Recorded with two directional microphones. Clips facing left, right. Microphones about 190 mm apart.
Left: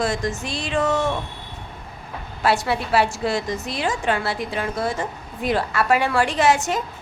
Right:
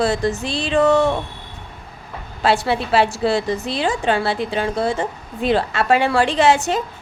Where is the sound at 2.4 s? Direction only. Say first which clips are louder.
Right 3 dB; 25° right (ahead or behind).